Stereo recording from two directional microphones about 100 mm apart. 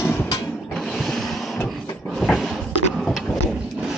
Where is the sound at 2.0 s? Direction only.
Centre (ahead or behind).